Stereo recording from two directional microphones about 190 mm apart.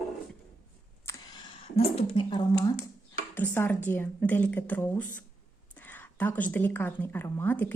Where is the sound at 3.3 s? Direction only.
10° left (ahead or behind).